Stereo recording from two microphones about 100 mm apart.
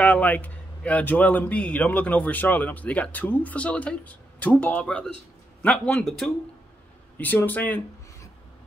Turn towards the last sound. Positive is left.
turn(degrees=20)  # may be behind; listen again after turning